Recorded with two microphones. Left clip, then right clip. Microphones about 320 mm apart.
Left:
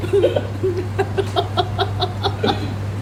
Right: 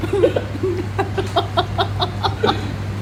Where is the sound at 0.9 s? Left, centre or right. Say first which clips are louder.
Right 2 dB; centre.